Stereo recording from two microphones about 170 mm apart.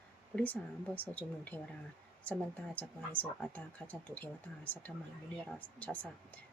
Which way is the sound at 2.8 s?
10° left (ahead or behind).